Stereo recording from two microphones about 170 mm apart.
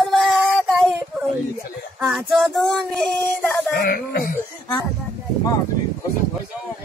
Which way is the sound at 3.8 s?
60° left (ahead or behind).